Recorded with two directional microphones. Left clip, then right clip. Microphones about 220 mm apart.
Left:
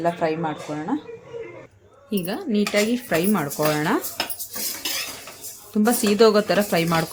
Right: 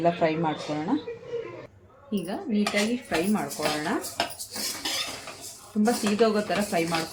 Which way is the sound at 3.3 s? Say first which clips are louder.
Left 6 dB; 55° left (ahead or behind).